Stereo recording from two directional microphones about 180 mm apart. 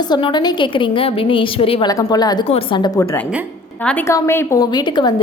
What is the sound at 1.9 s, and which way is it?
A woman's voice, 20° left (ahead or behind).